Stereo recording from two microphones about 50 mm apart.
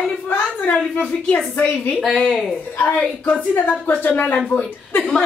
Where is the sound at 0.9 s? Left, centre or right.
Left.